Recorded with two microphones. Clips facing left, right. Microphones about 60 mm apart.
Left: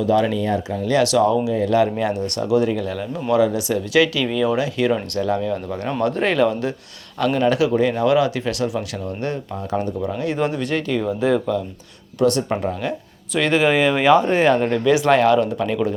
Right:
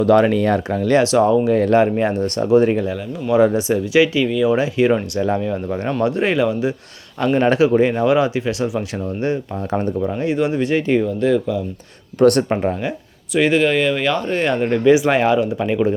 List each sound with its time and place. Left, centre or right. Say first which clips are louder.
0.0 s speech: right 5 dB; right
0.9 s speech: right 2 dB; right
1.5 s speech: right 5 dB; right
1.7 s speech: right 3 dB; right; by 6.7 s centre
7.3 s speech: right 4 dB; right
11.0 s speech: right 2 dB; centre
12.2 s speech: right 5 dB; right
12.5 s speech: right 3 dB; right
13.3 s speech: right 3 dB; centre
13.6 s speech: even; centre
14.5 s speech: right 3 dB; centre